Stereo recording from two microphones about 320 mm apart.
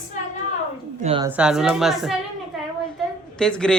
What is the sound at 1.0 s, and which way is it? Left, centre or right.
Speech, centre.